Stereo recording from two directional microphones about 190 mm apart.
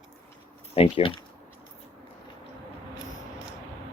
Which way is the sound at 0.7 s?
30° left (ahead or behind).